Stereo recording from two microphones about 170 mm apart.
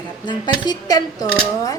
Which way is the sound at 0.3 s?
25° left (ahead or behind).